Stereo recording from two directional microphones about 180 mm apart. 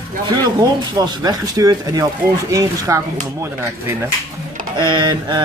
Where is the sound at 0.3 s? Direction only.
20° right (ahead or behind).